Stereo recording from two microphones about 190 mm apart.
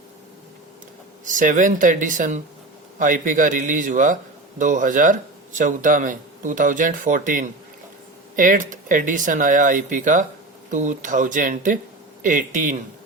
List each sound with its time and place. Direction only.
1.2 s speech: 45° right (ahead or behind)